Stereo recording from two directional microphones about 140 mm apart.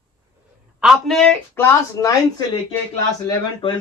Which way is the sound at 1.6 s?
25° left (ahead or behind).